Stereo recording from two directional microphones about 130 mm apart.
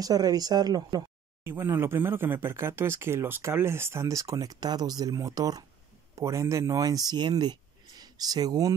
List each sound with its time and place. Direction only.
0.0 s speech: 30° right (ahead or behind)
1.4 s speech: 20° right (ahead or behind)